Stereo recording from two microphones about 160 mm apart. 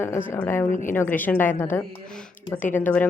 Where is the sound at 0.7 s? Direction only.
55° left (ahead or behind).